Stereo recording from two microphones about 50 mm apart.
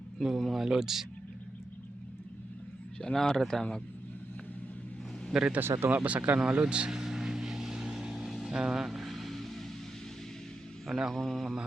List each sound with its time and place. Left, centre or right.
0.2 s speech: centre
3.0 s speech: centre
5.5 s speech: right
5.9 s speech: right
6.4 s speech: right
6.9 s vehicle: centre
10.8 s speech: centre
11.1 s speech: centre